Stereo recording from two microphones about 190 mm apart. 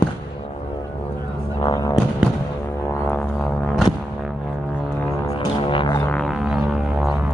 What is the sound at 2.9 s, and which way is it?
Didgeridoo, 10° left (ahead or behind).